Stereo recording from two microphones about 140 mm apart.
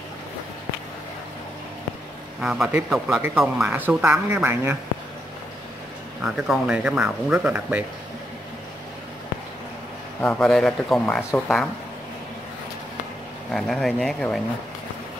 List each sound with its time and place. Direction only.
2.4 s speech: 5° right (ahead or behind)
6.2 s speech: 5° right (ahead or behind)
10.4 s speech: centre (ahead or behind)
13.5 s speech: 5° left (ahead or behind)